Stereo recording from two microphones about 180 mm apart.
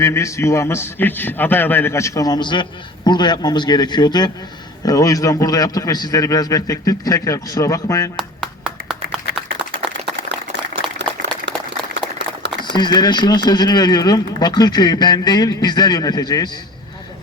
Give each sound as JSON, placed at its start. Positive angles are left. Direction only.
{"t": 0.0, "sound": "a man's voice", "side_deg": 15}
{"t": 10.9, "sound": "a sound", "side_deg": -75}
{"t": 12.7, "sound": "speech", "side_deg": 25}